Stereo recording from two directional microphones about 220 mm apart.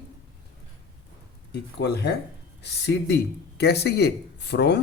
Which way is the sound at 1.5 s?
50° left (ahead or behind).